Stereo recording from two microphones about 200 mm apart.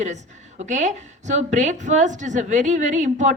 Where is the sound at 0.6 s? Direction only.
35° right (ahead or behind).